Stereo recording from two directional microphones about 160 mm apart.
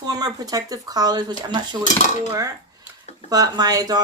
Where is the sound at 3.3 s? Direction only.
25° right (ahead or behind).